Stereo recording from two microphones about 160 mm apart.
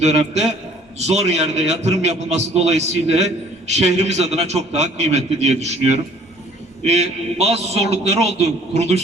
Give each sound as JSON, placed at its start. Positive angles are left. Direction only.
{"t": 0.0, "sound": "a man's voice", "side_deg": -45}